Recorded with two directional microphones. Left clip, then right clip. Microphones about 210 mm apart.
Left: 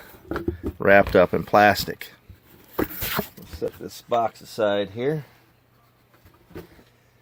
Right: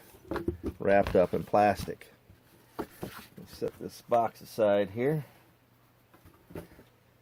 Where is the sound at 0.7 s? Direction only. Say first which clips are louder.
Left 9 dB; 25° left (ahead or behind).